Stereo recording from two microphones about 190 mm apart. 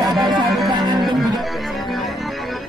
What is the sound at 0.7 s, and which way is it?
Music, 20° right (ahead or behind).